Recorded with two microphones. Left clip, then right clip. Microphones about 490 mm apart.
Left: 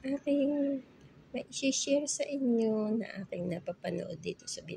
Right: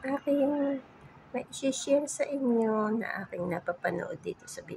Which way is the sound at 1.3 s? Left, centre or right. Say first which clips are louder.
Right 1 dB; left.